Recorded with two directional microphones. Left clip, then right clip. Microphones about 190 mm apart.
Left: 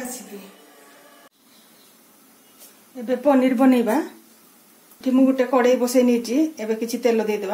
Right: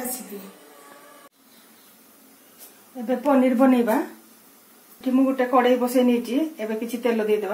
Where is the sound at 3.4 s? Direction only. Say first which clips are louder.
Left 1 dB; 55° left (ahead or behind).